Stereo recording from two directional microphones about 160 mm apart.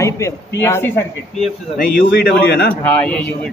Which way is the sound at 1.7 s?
65° left (ahead or behind).